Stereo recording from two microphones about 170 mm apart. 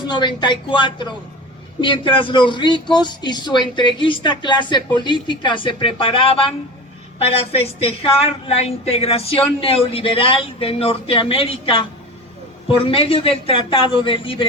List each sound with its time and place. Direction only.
0.0 s a man's voice: 25° left (ahead or behind)
7.5 s a woman's voice: 35° left (ahead or behind)